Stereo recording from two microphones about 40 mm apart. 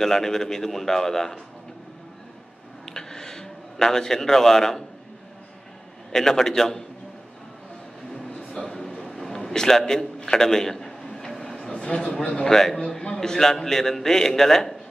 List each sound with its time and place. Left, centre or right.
0.0 s a man's voice: centre
2.8 s a sound: centre
6.1 s a man's voice: centre
8.5 s a sound: centre
11.5 s a man's voice: left
12.4 s a man's voice: centre